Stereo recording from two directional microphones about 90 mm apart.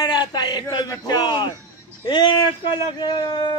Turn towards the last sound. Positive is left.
turn(degrees=55)  # may be behind; listen again after turning